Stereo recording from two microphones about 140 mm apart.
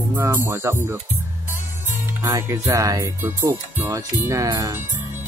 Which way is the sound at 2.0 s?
20° right (ahead or behind).